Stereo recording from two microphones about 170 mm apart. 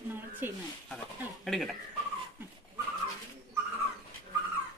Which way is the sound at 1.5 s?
Centre (ahead or behind).